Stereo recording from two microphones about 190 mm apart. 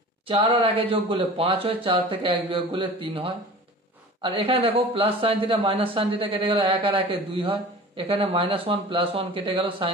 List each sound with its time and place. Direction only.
0.3 s speech: 30° right (ahead or behind)